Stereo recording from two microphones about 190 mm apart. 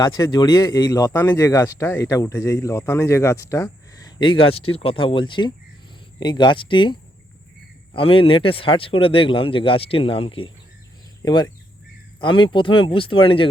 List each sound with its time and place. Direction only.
0.0 s a man's voice: 20° left (ahead or behind)
7.9 s a man's voice: 30° left (ahead or behind)